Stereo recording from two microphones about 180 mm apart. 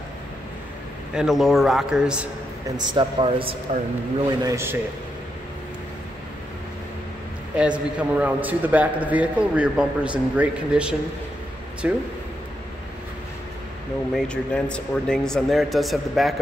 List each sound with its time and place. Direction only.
1.1 s speech: centre (ahead or behind)
2.9 s speech: 25° right (ahead or behind)
4.4 s a man's voice: 15° right (ahead or behind)
7.5 s a man's voice: 5° right (ahead or behind)
14.1 s speech: 5° left (ahead or behind)